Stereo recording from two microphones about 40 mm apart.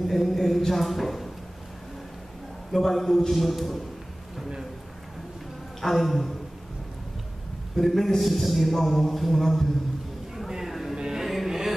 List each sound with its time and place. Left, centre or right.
0.0 s a man's voice: centre
2.7 s a man's voice: centre
5.8 s a man's voice: centre
7.7 s a man's voice: centre
10.3 s a sound: centre
11.0 s music: centre
11.2 s music: centre